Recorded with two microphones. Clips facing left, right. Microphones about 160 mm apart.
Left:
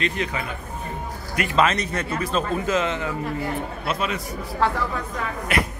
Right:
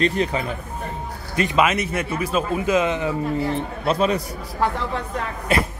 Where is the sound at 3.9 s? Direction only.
35° right (ahead or behind).